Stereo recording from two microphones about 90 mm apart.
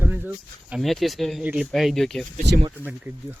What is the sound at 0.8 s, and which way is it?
A man's voice, centre (ahead or behind).